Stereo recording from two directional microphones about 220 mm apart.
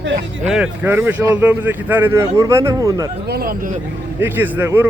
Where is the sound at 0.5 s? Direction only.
5° right (ahead or behind).